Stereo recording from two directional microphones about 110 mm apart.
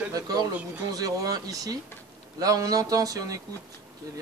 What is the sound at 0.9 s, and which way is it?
Speech, 35° right (ahead or behind).